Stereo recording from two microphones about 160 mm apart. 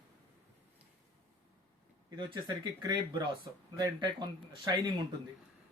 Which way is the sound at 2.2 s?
30° right (ahead or behind).